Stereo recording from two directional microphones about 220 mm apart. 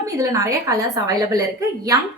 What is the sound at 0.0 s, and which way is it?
A woman's voice, 15° right (ahead or behind).